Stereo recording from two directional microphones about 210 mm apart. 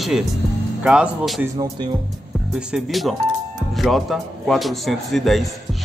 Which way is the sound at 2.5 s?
5° right (ahead or behind).